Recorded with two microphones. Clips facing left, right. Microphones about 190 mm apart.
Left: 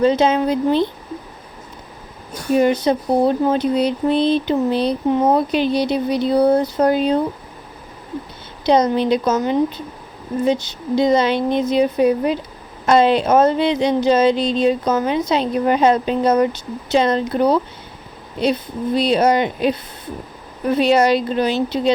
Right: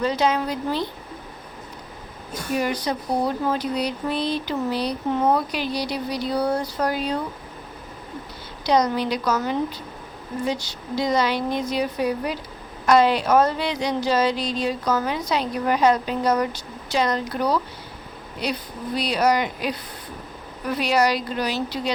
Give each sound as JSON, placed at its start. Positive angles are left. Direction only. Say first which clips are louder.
{"t": 0.0, "sound": "speech", "louder": "left 7 dB", "side_deg": 25}
{"t": 2.6, "sound": "speech", "louder": "left 10 dB", "side_deg": 25}
{"t": 8.6, "sound": "speech", "louder": "left 5 dB", "side_deg": 25}